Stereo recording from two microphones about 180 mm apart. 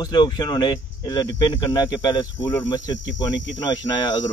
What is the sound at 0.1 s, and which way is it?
Speech, 25° left (ahead or behind).